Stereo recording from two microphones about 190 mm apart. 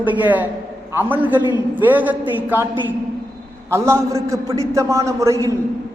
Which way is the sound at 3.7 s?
15° right (ahead or behind).